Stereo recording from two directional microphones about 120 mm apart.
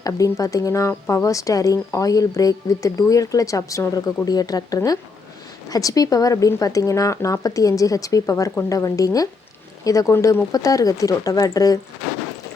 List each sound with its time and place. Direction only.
0.0 s speech: 30° left (ahead or behind)